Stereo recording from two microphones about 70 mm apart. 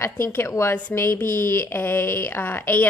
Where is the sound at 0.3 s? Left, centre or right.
Left.